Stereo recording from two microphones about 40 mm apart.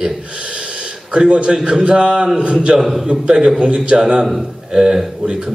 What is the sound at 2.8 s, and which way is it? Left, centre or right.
A man's voice, centre.